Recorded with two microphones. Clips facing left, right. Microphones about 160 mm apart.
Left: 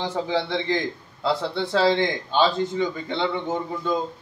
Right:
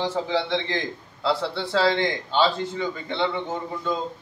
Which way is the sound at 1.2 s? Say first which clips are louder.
Left 1 dB; 20° left (ahead or behind).